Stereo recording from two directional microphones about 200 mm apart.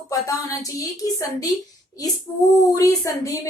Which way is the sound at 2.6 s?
15° left (ahead or behind).